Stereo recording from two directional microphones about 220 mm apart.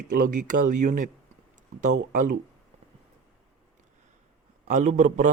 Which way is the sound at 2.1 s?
40° right (ahead or behind).